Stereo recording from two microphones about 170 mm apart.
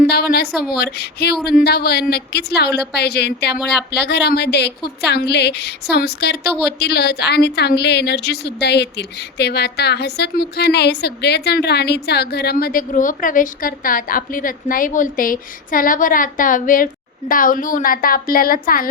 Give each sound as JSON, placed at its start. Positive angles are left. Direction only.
{"t": 0.1, "sound": "a woman's voice", "side_deg": 65}